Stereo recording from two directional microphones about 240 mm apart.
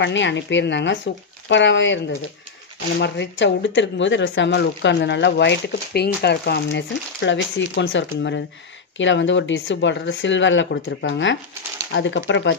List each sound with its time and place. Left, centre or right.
0.0 s speech: left